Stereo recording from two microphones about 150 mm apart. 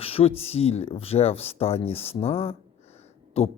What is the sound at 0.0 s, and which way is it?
Speech, 40° left (ahead or behind).